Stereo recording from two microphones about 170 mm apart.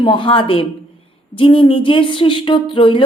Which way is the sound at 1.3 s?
30° left (ahead or behind).